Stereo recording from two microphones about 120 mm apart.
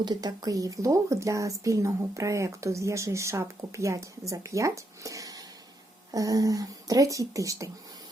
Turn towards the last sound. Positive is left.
turn(degrees=-25)  # may be behind; listen again after turning